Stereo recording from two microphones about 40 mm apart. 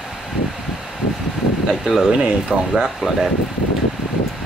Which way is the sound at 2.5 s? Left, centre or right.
Right.